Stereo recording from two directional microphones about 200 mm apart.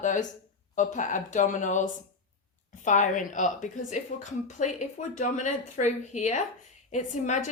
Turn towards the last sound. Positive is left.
turn(degrees=35)  # may be behind; listen again after turning